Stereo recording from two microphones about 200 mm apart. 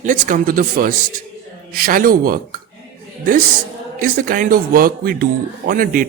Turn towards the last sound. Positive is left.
turn(degrees=-45)  # may be behind; listen again after turning